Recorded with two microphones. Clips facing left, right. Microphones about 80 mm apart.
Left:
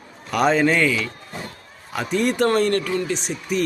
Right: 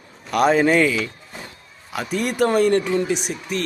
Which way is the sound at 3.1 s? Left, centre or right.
Centre.